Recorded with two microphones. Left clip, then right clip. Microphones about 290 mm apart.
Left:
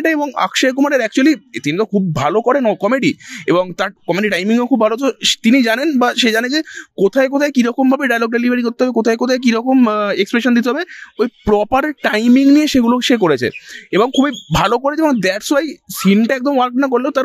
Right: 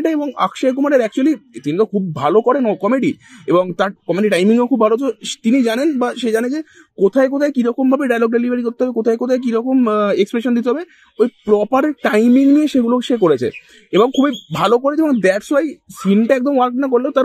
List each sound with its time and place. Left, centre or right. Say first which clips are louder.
0.0 s a man's voice: left 2 dB; left